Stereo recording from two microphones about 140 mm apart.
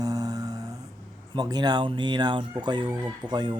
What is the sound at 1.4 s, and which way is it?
A man's voice, 30° right (ahead or behind).